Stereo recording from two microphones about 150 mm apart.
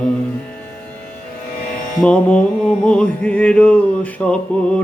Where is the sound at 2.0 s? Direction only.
10° left (ahead or behind).